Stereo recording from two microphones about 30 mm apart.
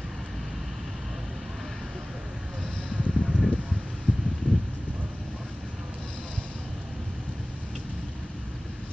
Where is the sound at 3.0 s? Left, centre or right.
Right.